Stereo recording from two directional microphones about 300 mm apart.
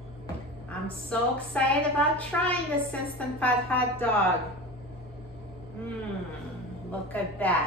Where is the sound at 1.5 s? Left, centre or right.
Centre.